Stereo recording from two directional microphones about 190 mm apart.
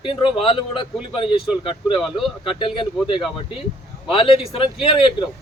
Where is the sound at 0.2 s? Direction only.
25° left (ahead or behind).